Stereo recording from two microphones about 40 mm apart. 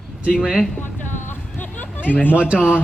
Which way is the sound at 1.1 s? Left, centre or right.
Left.